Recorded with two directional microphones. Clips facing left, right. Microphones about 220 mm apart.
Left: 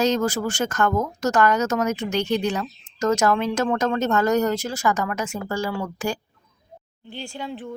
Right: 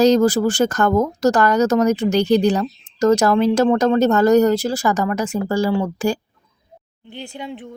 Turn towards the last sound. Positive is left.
turn(degrees=-20)  # may be behind; listen again after turning